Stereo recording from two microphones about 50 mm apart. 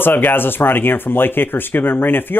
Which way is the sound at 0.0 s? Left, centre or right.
Left.